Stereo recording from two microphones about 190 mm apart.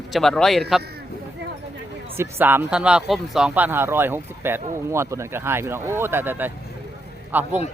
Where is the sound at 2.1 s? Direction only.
10° right (ahead or behind).